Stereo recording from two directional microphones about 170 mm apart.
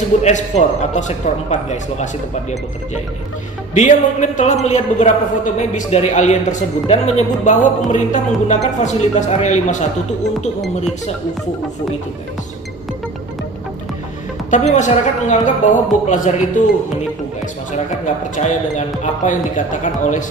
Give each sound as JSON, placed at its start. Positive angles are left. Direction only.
{"t": 0.2, "sound": "speech", "side_deg": 40}
{"t": 3.8, "sound": "speech", "side_deg": 45}
{"t": 14.5, "sound": "speech", "side_deg": 45}
{"t": 17.7, "sound": "speech", "side_deg": 45}